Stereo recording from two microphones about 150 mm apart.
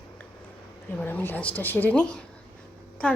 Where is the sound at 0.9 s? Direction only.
10° left (ahead or behind).